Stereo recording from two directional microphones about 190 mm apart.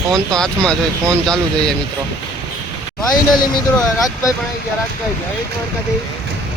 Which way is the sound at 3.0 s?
20° left (ahead or behind).